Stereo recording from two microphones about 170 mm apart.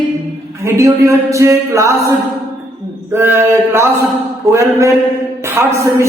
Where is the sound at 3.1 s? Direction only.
15° right (ahead or behind).